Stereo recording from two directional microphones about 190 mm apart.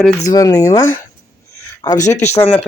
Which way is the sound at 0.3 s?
20° left (ahead or behind).